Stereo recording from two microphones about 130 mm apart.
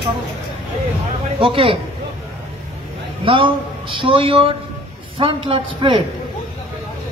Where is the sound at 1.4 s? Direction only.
45° right (ahead or behind).